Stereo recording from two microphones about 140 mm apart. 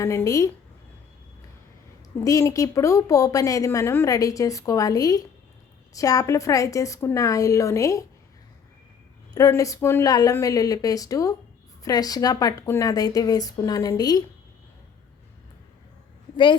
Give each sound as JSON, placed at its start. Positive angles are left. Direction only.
{"t": 0.0, "sound": "a woman's voice", "side_deg": 20}
{"t": 2.1, "sound": "a woman's voice", "side_deg": 25}
{"t": 9.3, "sound": "a woman's voice", "side_deg": 25}